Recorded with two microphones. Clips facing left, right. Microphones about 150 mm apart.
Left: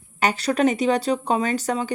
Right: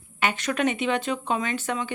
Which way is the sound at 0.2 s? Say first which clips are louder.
Left 5 dB; 35° left (ahead or behind).